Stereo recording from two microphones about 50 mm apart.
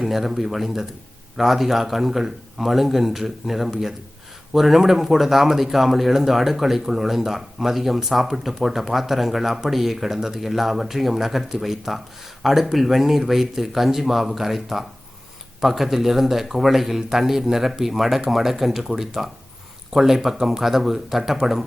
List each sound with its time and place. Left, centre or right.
0.0 s speech: centre